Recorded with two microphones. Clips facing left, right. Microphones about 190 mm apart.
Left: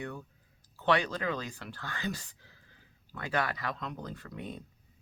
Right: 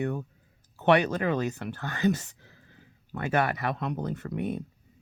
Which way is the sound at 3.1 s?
55° right (ahead or behind).